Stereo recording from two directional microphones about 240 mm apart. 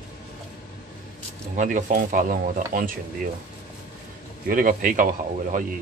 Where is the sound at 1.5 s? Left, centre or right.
Right.